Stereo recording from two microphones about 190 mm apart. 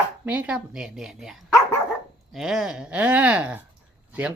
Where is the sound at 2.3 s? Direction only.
Centre (ahead or behind).